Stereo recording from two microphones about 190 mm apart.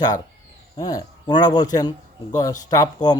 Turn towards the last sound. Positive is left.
turn(degrees=20)  # may be behind; listen again after turning